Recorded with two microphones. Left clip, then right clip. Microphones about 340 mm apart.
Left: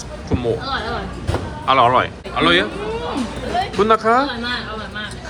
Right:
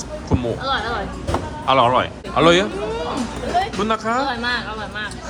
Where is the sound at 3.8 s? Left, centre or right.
Centre.